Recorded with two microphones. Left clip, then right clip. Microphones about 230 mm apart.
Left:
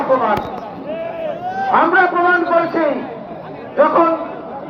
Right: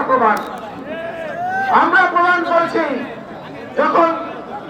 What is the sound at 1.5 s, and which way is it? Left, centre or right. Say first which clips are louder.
A man's voice: right 1 dB; right.